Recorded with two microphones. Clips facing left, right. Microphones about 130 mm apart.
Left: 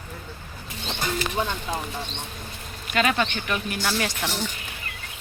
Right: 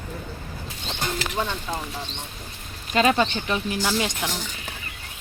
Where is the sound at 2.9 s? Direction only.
30° right (ahead or behind).